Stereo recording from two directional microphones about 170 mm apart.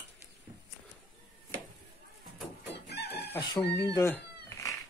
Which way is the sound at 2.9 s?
75° left (ahead or behind).